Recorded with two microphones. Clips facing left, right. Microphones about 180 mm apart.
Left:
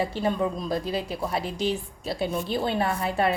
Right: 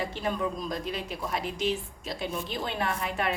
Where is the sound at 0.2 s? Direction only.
30° left (ahead or behind).